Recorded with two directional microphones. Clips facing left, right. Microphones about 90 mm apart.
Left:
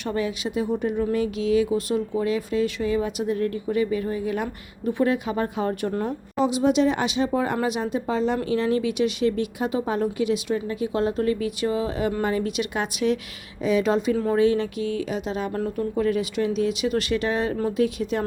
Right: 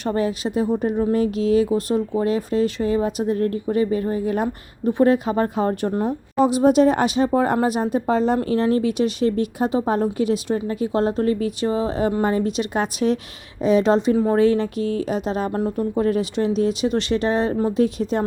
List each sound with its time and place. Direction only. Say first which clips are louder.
0.0 s speech: right 4 dB; 40° right (ahead or behind)
6.3 s speech: right 5 dB; 45° right (ahead or behind)
15.5 s speech: right 4 dB; 25° right (ahead or behind)
16.0 s speech: right 2 dB; 35° right (ahead or behind)